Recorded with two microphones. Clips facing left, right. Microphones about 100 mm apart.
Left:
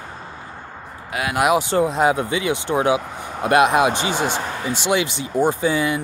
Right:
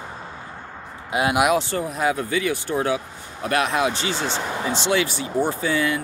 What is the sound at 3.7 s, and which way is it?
Speech, 55° left (ahead or behind).